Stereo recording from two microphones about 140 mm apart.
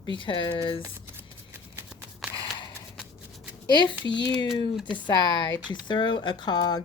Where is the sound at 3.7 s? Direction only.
35° left (ahead or behind).